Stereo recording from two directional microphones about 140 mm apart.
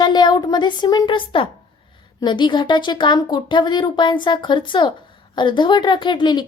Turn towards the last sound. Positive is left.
turn(degrees=30)  # may be behind; listen again after turning